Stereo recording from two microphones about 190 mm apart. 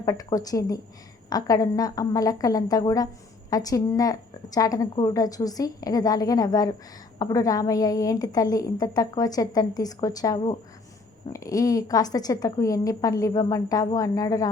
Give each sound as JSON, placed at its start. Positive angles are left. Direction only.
{"t": 0.0, "sound": "a woman's voice", "side_deg": 20}